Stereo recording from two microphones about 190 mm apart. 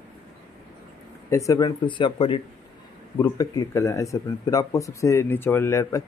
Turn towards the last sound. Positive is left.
turn(degrees=15)  # may be behind; listen again after turning